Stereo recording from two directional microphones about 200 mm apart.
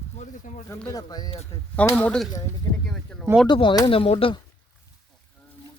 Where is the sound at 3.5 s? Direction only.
25° left (ahead or behind).